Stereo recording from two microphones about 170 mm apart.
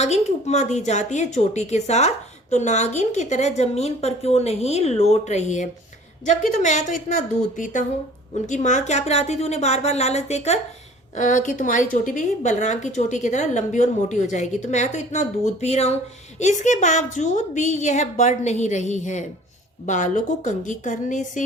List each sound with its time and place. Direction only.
0.0 s a woman's voice: 40° left (ahead or behind)